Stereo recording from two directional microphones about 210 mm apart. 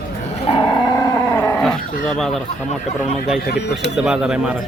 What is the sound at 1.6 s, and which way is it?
Dog, centre (ahead or behind).